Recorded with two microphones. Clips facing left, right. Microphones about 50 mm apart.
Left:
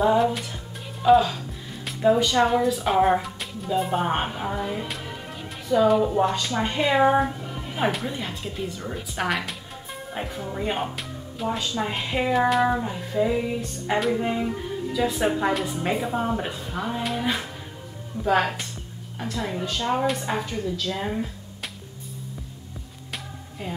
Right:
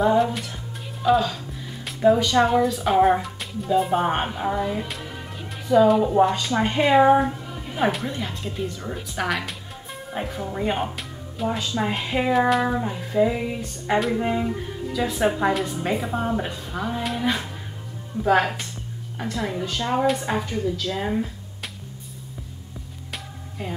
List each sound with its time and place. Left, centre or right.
0.0 s speech: centre
6.6 s a woman's voice: centre
6.9 s speech: centre
18.4 s speech: centre